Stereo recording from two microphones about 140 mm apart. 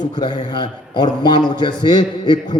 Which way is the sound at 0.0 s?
30° left (ahead or behind).